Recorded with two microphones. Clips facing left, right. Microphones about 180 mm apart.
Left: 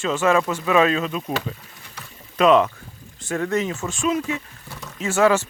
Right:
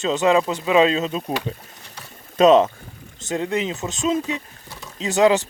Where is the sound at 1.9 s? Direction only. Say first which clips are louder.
Even; 25° right (ahead or behind).